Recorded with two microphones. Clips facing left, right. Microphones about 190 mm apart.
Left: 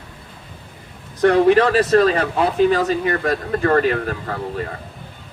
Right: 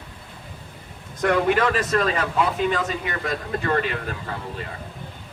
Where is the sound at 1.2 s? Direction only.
35° left (ahead or behind).